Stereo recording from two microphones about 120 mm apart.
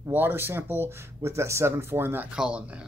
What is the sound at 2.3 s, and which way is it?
Speech, 10° right (ahead or behind).